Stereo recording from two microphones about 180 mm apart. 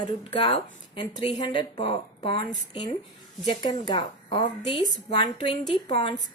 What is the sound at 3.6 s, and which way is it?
A woman's voice, 25° left (ahead or behind).